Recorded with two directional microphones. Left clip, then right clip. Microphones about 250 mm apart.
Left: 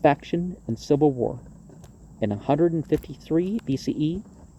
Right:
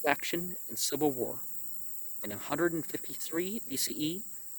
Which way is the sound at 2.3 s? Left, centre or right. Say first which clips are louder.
Left 9 dB; right.